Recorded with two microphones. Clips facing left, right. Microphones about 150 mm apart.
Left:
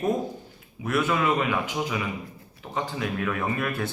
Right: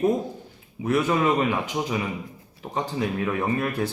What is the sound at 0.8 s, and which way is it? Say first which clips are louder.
A man's voice: right 3 dB; 30° right (ahead or behind).